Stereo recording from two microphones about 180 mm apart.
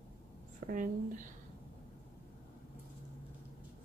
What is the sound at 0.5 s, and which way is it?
Speech, 50° right (ahead or behind).